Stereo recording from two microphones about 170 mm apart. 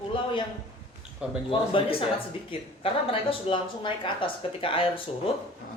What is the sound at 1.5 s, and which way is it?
A woman's voice, 30° left (ahead or behind).